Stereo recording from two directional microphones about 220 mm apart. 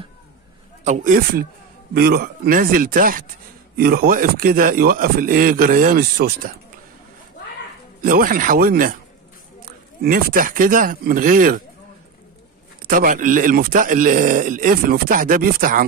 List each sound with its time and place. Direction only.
0.8 s speech: 40° right (ahead or behind)
8.0 s speech: 40° right (ahead or behind)
12.8 s speech: 40° right (ahead or behind)